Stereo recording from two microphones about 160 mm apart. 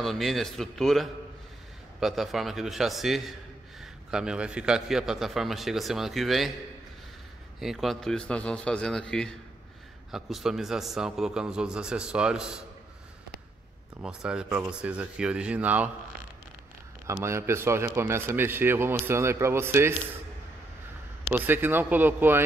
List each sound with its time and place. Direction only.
0.0 s a man's voice: centre (ahead or behind)
7.6 s a man's voice: centre (ahead or behind)
14.0 s a man's voice: 5° right (ahead or behind)
17.1 s a man's voice: 15° right (ahead or behind)
21.3 s a man's voice: 10° right (ahead or behind)